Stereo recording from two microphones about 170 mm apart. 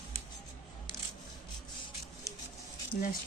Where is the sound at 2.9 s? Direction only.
55° left (ahead or behind).